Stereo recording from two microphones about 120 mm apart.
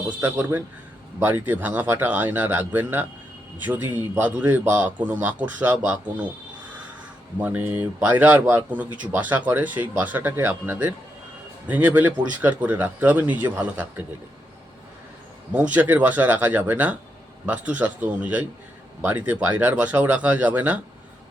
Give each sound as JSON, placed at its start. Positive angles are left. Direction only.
{"t": 0.2, "sound": "a man's voice", "side_deg": -15}
{"t": 7.4, "sound": "a man's voice", "side_deg": -15}
{"t": 15.5, "sound": "a man's voice", "side_deg": -10}